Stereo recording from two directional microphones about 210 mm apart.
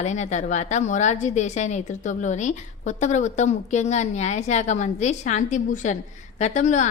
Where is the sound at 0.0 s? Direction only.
35° left (ahead or behind).